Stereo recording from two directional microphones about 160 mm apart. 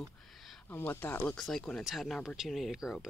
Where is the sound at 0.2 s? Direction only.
Centre (ahead or behind).